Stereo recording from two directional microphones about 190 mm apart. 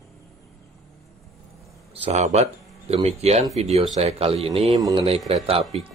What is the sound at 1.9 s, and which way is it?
Speech, 35° right (ahead or behind).